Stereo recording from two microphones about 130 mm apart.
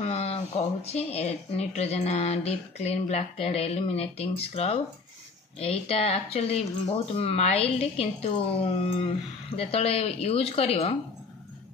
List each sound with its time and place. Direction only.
0.0 s speech: 50° left (ahead or behind)